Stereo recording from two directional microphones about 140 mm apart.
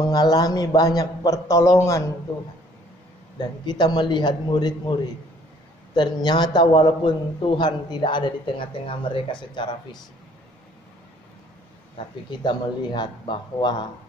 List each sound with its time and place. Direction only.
0.0 s a man's voice: 25° left (ahead or behind)
3.3 s speech: 30° left (ahead or behind)
12.3 s speech: 30° left (ahead or behind)